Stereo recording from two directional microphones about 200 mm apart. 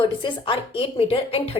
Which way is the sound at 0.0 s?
25° left (ahead or behind).